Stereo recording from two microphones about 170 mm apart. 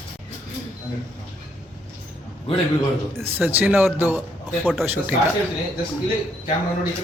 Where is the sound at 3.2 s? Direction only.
10° right (ahead or behind).